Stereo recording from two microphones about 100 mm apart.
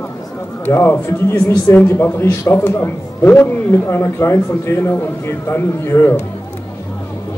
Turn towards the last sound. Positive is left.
turn(degrees=25)  # may be behind; listen again after turning